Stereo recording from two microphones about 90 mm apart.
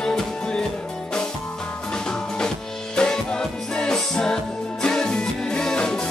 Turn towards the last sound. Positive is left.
turn(degrees=10)  # may be behind; listen again after turning